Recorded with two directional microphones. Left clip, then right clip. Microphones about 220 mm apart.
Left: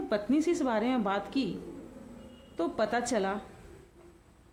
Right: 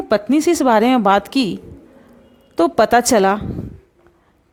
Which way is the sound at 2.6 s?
45° right (ahead or behind).